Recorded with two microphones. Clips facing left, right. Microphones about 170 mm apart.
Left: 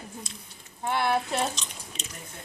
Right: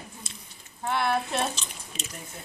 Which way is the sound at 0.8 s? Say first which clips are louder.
Even; 10° left (ahead or behind).